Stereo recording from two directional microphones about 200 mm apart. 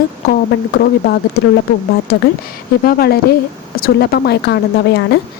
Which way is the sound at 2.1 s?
55° left (ahead or behind).